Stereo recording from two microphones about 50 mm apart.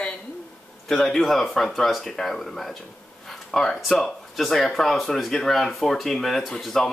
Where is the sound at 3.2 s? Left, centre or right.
Centre.